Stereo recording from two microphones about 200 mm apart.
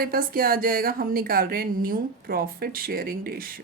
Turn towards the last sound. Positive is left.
turn(degrees=-45)  # may be behind; listen again after turning